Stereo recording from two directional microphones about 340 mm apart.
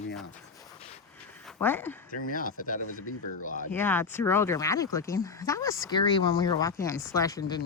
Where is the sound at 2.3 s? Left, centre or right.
Left.